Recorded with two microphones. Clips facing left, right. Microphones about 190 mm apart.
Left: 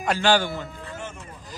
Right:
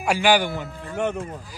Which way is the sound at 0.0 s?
10° right (ahead or behind).